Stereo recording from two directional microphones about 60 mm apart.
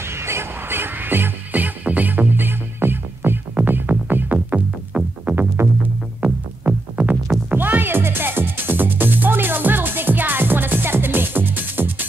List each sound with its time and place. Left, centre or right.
0.1 s music: right
5.6 s music: right
6.2 s music: right